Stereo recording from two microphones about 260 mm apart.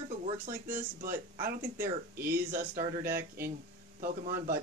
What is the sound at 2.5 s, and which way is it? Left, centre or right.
Speech, right.